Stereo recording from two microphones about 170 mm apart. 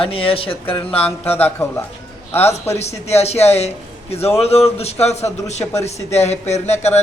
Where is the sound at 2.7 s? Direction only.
40° left (ahead or behind).